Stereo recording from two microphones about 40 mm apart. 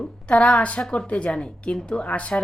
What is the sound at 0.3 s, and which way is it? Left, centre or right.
Speech, left.